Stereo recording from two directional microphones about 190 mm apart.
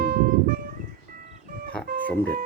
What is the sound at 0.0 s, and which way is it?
Music, 55° right (ahead or behind).